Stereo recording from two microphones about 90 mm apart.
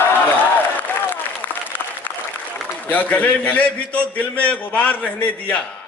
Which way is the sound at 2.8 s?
20° left (ahead or behind).